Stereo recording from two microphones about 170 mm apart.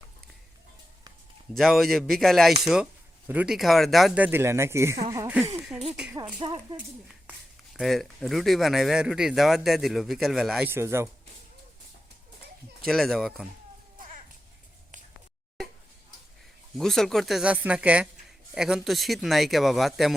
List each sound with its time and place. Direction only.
1.5 s speech: centre (ahead or behind); by 4.9 s 15° right (ahead or behind)
5.1 s a sound: 15° right (ahead or behind)
6.4 s speech: 30° right (ahead or behind)
7.1 s speech: centre (ahead or behind)
12.8 s speech: centre (ahead or behind)
16.7 s speech: centre (ahead or behind)